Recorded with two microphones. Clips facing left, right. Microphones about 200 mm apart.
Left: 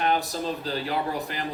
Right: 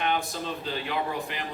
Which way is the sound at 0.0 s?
40° left (ahead or behind).